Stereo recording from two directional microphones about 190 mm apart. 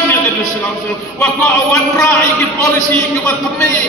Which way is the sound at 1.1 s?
15° left (ahead or behind).